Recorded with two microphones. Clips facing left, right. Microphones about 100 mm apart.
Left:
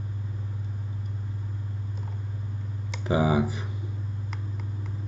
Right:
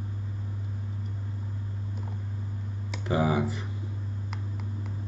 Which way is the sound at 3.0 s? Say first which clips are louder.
Left 2 dB; 15° left (ahead or behind).